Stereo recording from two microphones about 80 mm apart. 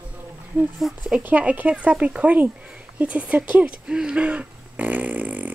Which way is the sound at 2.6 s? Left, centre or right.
Centre.